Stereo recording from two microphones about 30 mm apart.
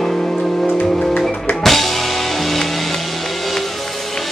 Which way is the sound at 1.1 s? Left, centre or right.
Centre.